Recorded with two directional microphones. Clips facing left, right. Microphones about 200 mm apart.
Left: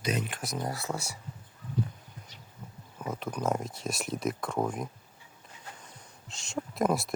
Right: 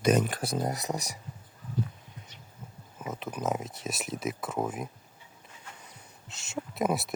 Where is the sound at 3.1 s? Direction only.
Centre (ahead or behind).